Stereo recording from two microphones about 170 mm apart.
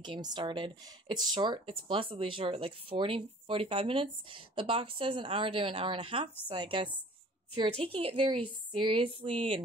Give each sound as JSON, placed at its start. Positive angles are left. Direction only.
{"t": 0.0, "sound": "a woman's voice", "side_deg": -25}